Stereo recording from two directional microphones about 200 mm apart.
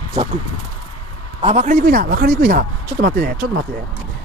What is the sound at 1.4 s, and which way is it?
Speech, 35° right (ahead or behind).